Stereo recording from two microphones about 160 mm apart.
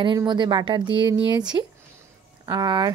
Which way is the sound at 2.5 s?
25° right (ahead or behind).